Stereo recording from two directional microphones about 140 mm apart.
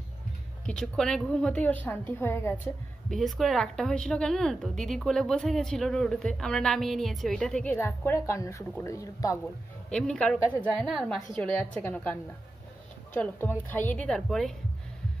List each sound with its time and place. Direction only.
0.7 s a woman's voice: 5° left (ahead or behind); by 9.4 s 25° left (ahead or behind)
9.8 s a woman's voice: 5° left (ahead or behind)
11.5 s a woman's voice: 10° left (ahead or behind)